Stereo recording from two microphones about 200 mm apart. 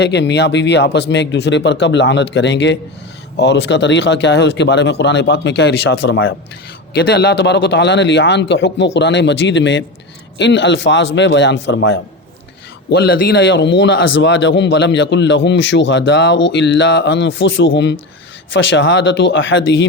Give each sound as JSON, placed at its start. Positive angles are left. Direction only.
{"t": 0.0, "sound": "a man's voice", "side_deg": 60}
{"t": 12.9, "sound": "a man's voice", "side_deg": 50}